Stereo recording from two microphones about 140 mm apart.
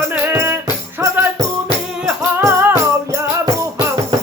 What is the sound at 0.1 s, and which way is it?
Music, 15° right (ahead or behind).